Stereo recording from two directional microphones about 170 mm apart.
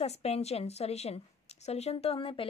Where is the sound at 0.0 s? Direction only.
35° left (ahead or behind).